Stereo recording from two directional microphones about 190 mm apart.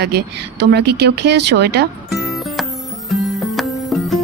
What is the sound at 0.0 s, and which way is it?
Speech, 60° right (ahead or behind).